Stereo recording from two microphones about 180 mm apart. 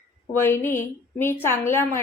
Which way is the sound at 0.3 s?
15° left (ahead or behind).